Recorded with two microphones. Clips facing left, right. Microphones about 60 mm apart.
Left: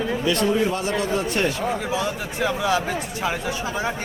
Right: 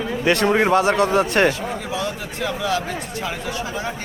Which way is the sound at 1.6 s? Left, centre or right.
Centre.